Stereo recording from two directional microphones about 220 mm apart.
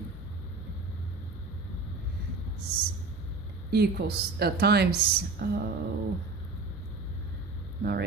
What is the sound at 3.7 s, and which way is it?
Speech, 45° right (ahead or behind).